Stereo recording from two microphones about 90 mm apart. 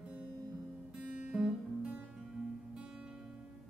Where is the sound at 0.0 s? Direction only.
15° right (ahead or behind).